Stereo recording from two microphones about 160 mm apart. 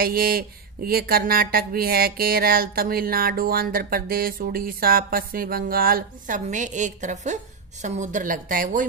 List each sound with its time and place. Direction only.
0.0 s a woman's voice: 65° right (ahead or behind)